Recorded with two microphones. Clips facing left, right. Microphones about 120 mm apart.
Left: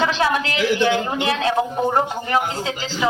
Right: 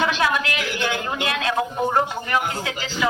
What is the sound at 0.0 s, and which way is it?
A woman's voice, 30° left (ahead or behind).